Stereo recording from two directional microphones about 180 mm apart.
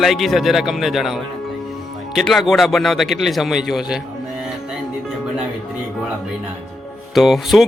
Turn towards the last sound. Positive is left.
turn(degrees=0)  # may be behind; listen again after turning